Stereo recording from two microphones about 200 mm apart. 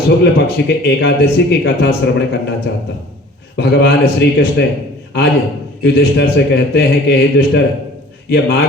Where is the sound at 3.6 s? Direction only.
55° left (ahead or behind).